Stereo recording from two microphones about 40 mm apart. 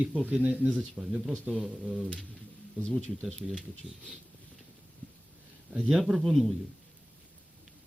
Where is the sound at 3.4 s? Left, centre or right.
Centre.